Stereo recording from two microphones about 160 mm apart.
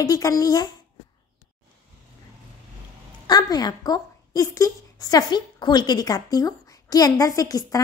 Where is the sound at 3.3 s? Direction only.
25° left (ahead or behind).